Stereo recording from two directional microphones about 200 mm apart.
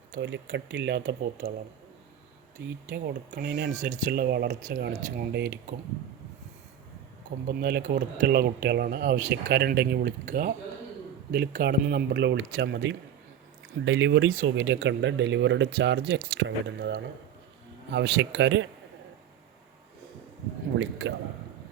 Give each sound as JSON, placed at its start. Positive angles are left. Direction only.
{"t": 0.2, "sound": "speech", "side_deg": -65}
{"t": 2.9, "sound": "speech", "side_deg": -55}
{"t": 3.7, "sound": "speech", "side_deg": -40}
{"t": 7.4, "sound": "speech", "side_deg": -50}
{"t": 20.7, "sound": "speech", "side_deg": -65}